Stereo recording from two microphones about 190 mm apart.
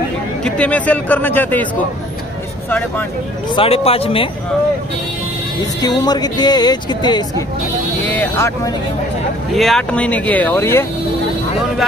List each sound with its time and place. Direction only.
0.4 s speech: 5° left (ahead or behind)
3.5 s speech: 30° left (ahead or behind)
5.8 s speech: 20° left (ahead or behind)
8.0 s speech: 10° left (ahead or behind)
9.6 s speech: centre (ahead or behind)